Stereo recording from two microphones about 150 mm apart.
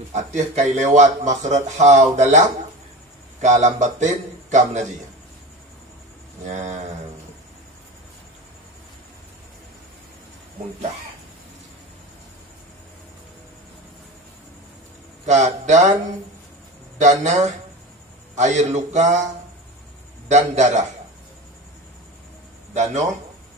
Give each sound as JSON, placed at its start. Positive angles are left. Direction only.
{"t": 0.1, "sound": "a man's voice", "side_deg": -50}
{"t": 6.4, "sound": "a man's voice", "side_deg": -50}
{"t": 15.2, "sound": "a man's voice", "side_deg": -50}
{"t": 17.0, "sound": "a man's voice", "side_deg": -50}
{"t": 20.2, "sound": "a man's voice", "side_deg": -50}
{"t": 22.8, "sound": "a man's voice", "side_deg": -50}